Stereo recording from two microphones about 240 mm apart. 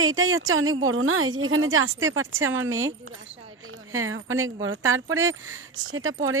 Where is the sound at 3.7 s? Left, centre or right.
Right.